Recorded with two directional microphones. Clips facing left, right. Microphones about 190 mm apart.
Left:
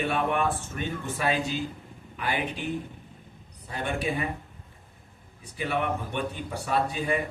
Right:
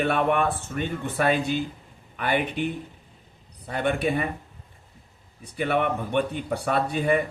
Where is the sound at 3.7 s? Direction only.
60° right (ahead or behind).